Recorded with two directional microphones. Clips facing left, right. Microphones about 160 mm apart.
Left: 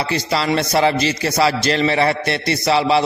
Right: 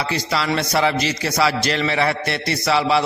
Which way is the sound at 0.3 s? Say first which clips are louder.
Left 3 dB; 30° left (ahead or behind).